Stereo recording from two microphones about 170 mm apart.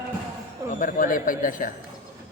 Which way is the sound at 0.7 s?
55° left (ahead or behind).